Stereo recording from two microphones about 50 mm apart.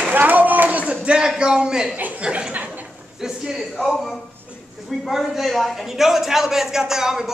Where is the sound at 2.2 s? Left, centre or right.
Right.